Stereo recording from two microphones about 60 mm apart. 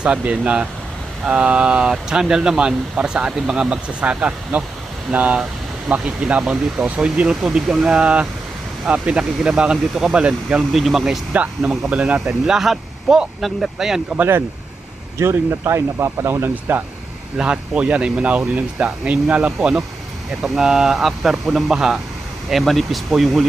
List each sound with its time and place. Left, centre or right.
0.0 s speech: centre
10.7 s speech: centre
11.9 s speech: right
12.2 s speech: centre
14.2 s speech: right
17.3 s speech: centre